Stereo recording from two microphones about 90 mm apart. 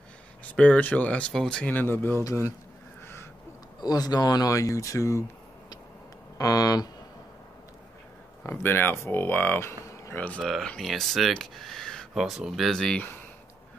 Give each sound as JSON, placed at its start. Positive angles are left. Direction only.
{"t": 0.6, "sound": "speech", "side_deg": 15}
{"t": 1.7, "sound": "speech", "side_deg": 20}
{"t": 3.8, "sound": "speech", "side_deg": 50}
{"t": 6.3, "sound": "speech", "side_deg": 40}
{"t": 8.5, "sound": "speech", "side_deg": 25}
{"t": 9.7, "sound": "a sound", "side_deg": 30}
{"t": 10.2, "sound": "speech", "side_deg": 15}
{"t": 12.2, "sound": "speech", "side_deg": -5}
{"t": 12.7, "sound": "speech", "side_deg": 10}